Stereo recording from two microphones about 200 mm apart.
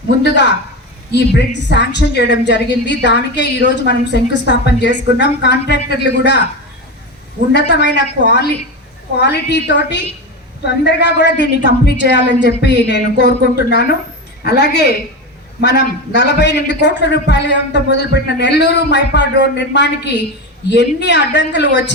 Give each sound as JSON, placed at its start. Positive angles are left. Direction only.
{"t": 0.2, "sound": "a man's voice", "side_deg": 55}
{"t": 1.7, "sound": "a man's voice", "side_deg": 60}
{"t": 7.5, "sound": "a man's voice", "side_deg": 60}